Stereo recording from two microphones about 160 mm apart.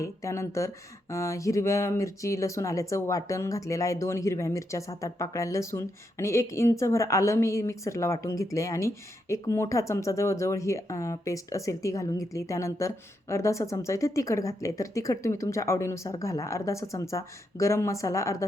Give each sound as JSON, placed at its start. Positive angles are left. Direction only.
{"t": 0.0, "sound": "speech", "side_deg": 20}